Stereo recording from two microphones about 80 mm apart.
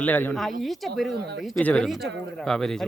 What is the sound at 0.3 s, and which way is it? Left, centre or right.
Speech, centre.